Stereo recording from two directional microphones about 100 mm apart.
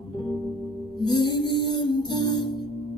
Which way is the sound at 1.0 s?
45° left (ahead or behind).